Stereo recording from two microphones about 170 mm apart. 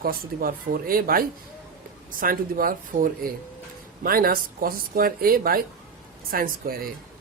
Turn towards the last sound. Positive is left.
turn(degrees=-60)  # may be behind; listen again after turning